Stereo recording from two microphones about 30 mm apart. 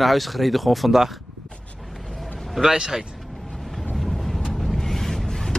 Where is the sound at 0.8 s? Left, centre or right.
Centre.